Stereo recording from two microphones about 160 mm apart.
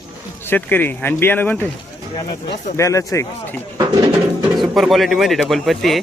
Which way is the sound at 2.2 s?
30° left (ahead or behind).